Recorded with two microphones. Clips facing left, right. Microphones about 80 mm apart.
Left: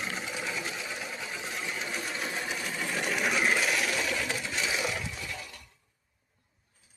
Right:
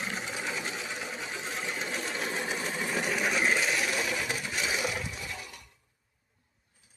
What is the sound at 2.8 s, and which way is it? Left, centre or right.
Sewing machine, centre.